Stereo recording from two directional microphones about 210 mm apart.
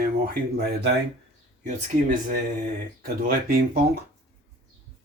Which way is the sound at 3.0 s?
45° right (ahead or behind).